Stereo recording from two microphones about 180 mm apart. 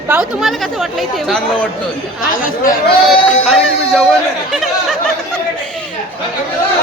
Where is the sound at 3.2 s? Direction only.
Centre (ahead or behind).